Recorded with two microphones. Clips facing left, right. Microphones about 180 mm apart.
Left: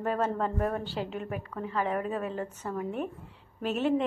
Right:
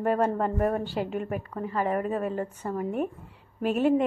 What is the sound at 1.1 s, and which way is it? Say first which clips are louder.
A woman's voice: right 4 dB; 50° right (ahead or behind).